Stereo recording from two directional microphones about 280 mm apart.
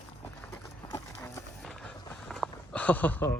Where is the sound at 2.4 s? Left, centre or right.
Centre.